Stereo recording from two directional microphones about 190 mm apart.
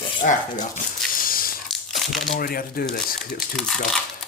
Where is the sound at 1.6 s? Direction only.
Centre (ahead or behind).